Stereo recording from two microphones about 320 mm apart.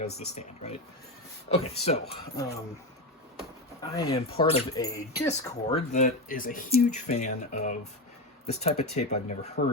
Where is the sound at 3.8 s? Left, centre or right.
Centre.